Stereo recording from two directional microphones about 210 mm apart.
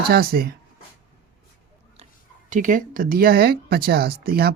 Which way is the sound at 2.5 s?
40° right (ahead or behind).